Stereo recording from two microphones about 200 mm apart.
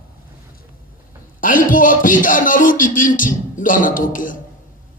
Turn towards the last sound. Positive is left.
turn(degrees=40)  # may be behind; listen again after turning